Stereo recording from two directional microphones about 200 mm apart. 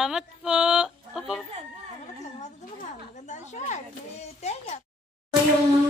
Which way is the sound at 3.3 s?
35° left (ahead or behind).